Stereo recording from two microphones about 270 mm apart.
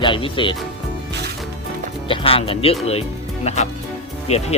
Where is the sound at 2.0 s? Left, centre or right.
Centre.